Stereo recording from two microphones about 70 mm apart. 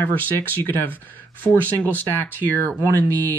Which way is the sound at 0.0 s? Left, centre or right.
Left.